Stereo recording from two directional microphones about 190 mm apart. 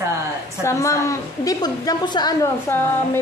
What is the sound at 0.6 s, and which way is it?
A woman's voice, 15° left (ahead or behind).